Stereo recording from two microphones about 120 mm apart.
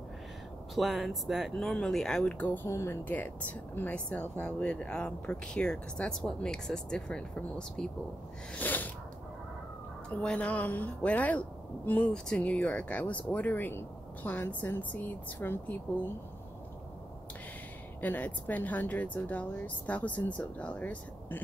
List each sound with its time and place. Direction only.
0.7 s speech: centre (ahead or behind); by 8.9 s 15° left (ahead or behind)
10.0 s speech: 10° left (ahead or behind)
18.0 s speech: 15° left (ahead or behind)